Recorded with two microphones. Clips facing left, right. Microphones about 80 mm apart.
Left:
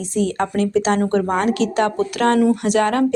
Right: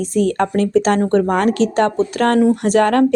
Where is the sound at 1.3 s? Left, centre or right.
Right.